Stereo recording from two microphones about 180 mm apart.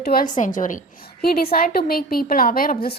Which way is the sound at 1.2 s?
60° left (ahead or behind).